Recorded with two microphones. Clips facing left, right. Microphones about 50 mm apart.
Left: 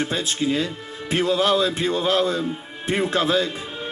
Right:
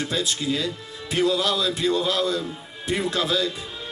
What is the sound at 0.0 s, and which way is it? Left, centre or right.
Music, left.